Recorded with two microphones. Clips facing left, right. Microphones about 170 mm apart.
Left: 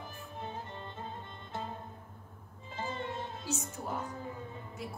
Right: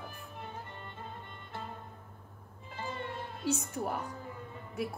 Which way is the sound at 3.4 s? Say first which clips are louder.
Right 8 dB; 60° right (ahead or behind).